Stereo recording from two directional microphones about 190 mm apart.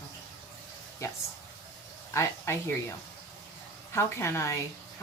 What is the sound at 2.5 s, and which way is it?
Speech, 15° left (ahead or behind).